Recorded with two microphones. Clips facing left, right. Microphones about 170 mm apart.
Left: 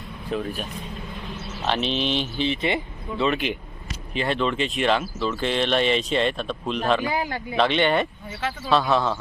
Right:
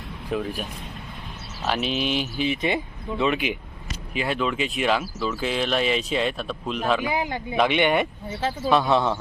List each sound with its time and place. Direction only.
0.3 s speech: 10° right (ahead or behind)
1.6 s speech: 5° right (ahead or behind)
7.1 s speech: 20° right (ahead or behind)
8.4 s speech: 30° right (ahead or behind)
8.7 s speech: 20° right (ahead or behind)